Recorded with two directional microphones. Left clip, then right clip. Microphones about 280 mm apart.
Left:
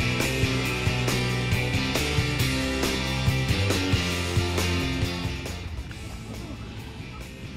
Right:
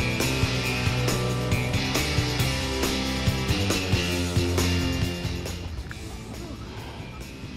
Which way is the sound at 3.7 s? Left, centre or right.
Centre.